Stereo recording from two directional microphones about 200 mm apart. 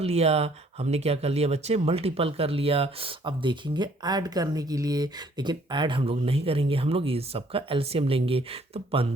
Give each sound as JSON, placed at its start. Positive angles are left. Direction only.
{"t": 0.0, "sound": "speech", "side_deg": -30}